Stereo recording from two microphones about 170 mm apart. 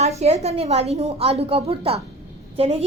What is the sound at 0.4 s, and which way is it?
A woman's voice, 40° right (ahead or behind).